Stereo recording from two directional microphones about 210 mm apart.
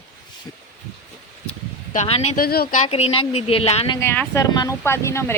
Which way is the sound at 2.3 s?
45° left (ahead or behind).